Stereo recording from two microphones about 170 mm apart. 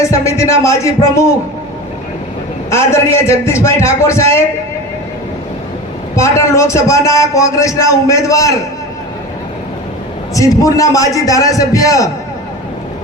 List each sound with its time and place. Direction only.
0.0 s a man's voice: 15° left (ahead or behind)
2.6 s a man's voice: 15° left (ahead or behind)
6.1 s a man's voice: 15° left (ahead or behind)
10.3 s a man's voice: 20° left (ahead or behind)